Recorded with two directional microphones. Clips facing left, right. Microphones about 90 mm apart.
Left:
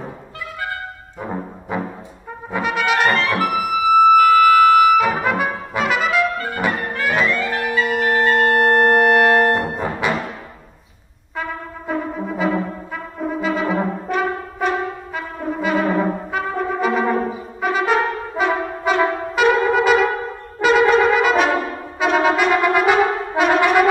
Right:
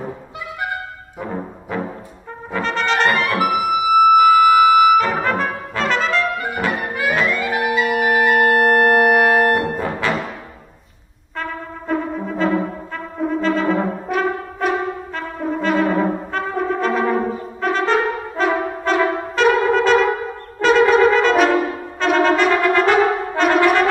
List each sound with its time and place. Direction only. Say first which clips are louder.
1.7 s brass instrument: even; 15° left (ahead or behind)
3.1 s music: even; 15° right (ahead or behind)
3.9 s a sound: even; 15° right (ahead or behind)
4.9 s brass instrument: even; 5° left (ahead or behind)
6.3 s brass instrument: right 1 dB; 15° right (ahead or behind)
6.9 s music: even; 10° right (ahead or behind)
9.8 s brass instrument: even; 15° left (ahead or behind)
11.9 s brass instrument: right 2 dB; 5° left (ahead or behind)